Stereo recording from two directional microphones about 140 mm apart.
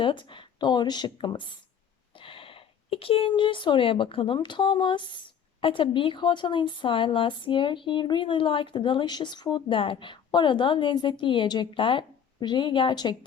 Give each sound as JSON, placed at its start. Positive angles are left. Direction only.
{"t": 0.0, "sound": "speech", "side_deg": 35}